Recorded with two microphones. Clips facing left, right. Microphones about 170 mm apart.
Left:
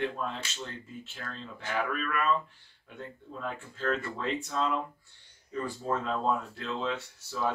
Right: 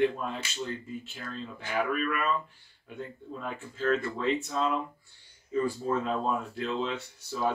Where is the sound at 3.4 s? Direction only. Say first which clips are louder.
Right 2 dB; 5° right (ahead or behind).